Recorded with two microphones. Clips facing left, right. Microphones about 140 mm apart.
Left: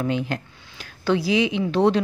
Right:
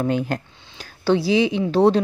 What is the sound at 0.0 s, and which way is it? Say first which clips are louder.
Speech: right 3 dB; 45° right (ahead or behind).